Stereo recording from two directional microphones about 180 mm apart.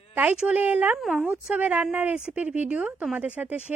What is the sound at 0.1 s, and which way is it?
A woman's voice, 10° right (ahead or behind).